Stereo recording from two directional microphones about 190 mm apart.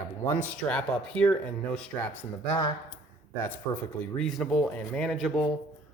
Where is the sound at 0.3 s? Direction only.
5° left (ahead or behind).